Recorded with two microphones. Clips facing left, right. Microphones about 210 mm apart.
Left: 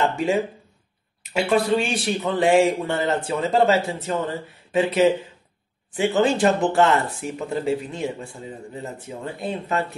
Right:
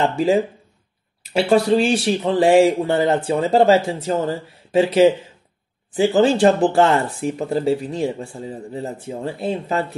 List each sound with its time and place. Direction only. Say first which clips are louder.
0.0 s speech: right 4 dB; 35° right (ahead or behind)